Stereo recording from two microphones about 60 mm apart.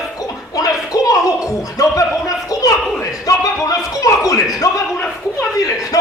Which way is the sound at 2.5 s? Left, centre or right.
Left.